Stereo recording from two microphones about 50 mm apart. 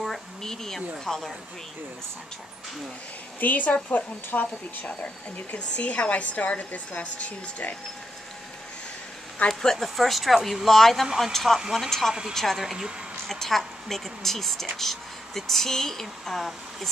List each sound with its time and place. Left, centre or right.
0.0 s speech: centre
3.3 s speech: left
9.5 s speech: centre
12.1 s speech: centre
13.3 s speech: centre